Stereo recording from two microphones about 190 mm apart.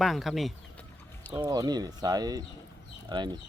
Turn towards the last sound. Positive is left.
turn(degrees=-25)  # may be behind; listen again after turning